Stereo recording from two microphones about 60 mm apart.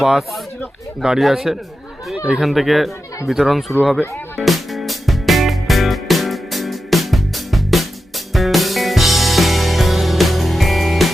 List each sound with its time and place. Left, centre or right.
0.0 s speech: centre
2.1 s speech: centre
2.4 s speech: centre
4.4 s music: centre